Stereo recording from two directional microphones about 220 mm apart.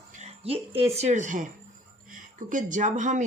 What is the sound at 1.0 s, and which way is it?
Speech, 35° right (ahead or behind).